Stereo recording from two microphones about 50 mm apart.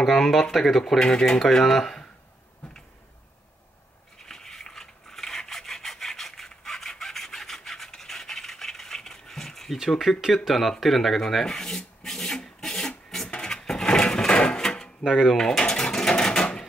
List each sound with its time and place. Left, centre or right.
0.0 s speech: centre
1.5 s speech: centre
4.3 s rub: centre
9.8 s speech: centre
10.8 s rub: centre
13.3 s a sound: centre
15.0 s speech: centre
15.3 s mechanisms: centre